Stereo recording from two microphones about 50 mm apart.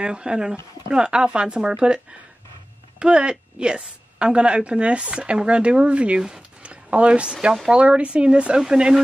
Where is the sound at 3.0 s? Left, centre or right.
Centre.